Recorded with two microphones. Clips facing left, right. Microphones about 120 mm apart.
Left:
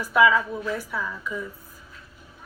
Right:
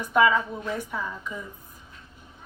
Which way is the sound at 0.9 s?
25° right (ahead or behind).